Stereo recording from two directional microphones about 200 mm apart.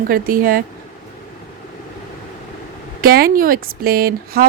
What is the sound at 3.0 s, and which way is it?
A woman's voice, 50° right (ahead or behind).